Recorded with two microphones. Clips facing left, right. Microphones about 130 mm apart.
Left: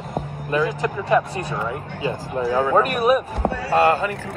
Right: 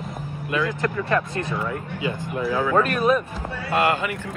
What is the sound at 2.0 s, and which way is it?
Speech, 35° left (ahead or behind).